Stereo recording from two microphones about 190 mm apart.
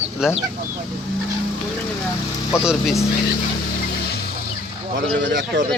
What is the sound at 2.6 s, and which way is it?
Speech, centre (ahead or behind).